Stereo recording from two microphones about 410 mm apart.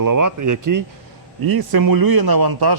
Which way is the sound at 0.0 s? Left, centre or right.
Right.